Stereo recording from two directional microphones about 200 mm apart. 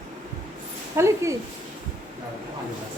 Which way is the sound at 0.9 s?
15° right (ahead or behind).